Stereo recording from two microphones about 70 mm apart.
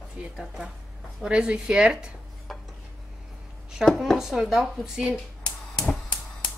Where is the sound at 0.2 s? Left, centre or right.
Centre.